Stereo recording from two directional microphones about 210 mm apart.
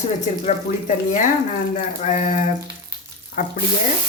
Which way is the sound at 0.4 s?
35° left (ahead or behind).